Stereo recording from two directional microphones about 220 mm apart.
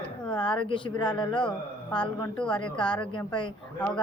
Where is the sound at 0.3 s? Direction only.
20° left (ahead or behind).